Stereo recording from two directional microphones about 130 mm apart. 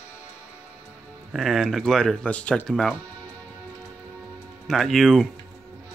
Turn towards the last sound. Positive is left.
turn(degrees=0)  # may be behind; listen again after turning